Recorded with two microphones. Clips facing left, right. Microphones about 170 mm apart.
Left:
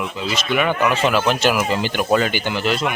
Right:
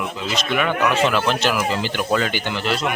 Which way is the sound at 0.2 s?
5° left (ahead or behind).